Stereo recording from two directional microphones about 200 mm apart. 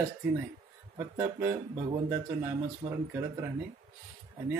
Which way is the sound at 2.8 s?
25° right (ahead or behind).